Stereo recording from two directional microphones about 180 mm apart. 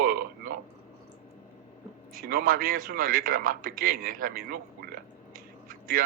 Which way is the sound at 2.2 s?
50° right (ahead or behind).